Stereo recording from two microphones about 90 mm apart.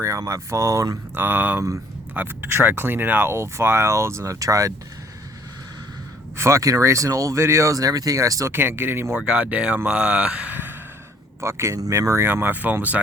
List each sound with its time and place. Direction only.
0.0 s speech: 35° right (ahead or behind)
1.1 s speech: 20° right (ahead or behind); by 4.7 s 40° right (ahead or behind)
6.3 s speech: 30° right (ahead or behind)
8.5 s speech: 25° right (ahead or behind)
9.1 s speech: 10° right (ahead or behind); by 12.3 s 35° right (ahead or behind)
12.3 s speech: 20° right (ahead or behind)